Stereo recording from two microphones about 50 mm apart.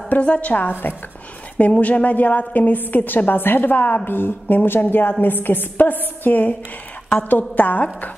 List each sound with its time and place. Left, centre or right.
0.2 s speech: left
0.5 s a woman's voice: left